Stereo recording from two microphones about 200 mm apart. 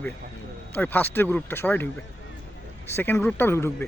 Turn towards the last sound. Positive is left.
turn(degrees=10)  # may be behind; listen again after turning